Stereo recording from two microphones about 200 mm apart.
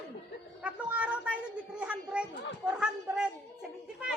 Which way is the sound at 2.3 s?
60° left (ahead or behind).